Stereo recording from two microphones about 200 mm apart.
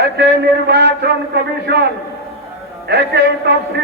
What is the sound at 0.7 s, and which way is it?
A man's voice, 55° right (ahead or behind).